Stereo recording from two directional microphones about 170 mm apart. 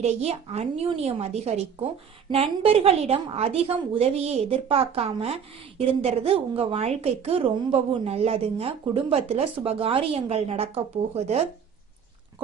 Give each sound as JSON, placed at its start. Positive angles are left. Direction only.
{"t": 0.0, "sound": "a woman's voice", "side_deg": -40}